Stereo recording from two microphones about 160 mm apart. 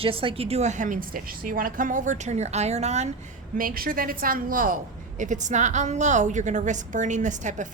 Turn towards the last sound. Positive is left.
turn(degrees=-50)  # may be behind; listen again after turning